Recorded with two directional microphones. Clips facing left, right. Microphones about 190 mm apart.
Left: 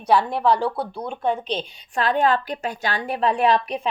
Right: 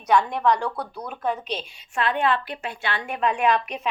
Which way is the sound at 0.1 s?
35° left (ahead or behind).